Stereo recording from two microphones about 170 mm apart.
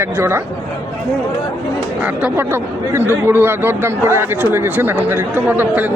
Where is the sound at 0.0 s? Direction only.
15° right (ahead or behind).